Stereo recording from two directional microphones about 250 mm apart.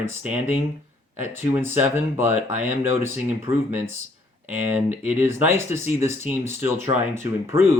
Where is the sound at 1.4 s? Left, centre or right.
Centre.